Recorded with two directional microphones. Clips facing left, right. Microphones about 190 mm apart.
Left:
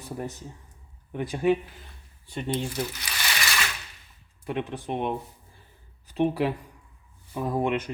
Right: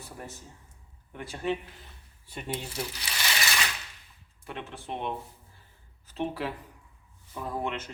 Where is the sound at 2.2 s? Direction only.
5° right (ahead or behind).